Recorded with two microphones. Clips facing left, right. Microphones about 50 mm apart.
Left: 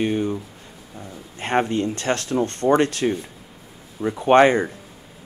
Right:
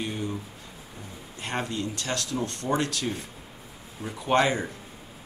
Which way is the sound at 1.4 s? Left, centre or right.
Left.